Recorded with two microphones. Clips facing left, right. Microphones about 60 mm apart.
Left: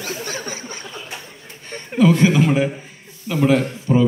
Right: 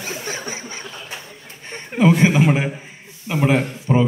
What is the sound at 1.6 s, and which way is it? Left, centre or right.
A man's voice, right.